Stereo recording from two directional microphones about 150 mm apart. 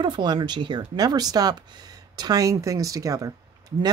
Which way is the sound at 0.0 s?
30° right (ahead or behind).